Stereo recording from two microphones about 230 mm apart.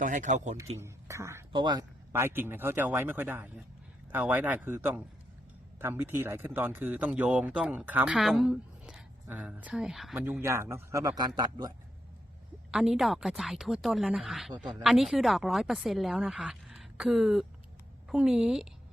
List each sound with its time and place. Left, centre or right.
0.0 s speech: right
0.8 s speech: centre
12.7 s speech: centre